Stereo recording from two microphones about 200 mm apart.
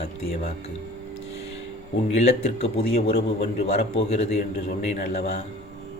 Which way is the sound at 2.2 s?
30° left (ahead or behind).